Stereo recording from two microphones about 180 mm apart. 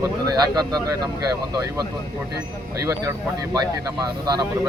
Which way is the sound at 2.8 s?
15° right (ahead or behind).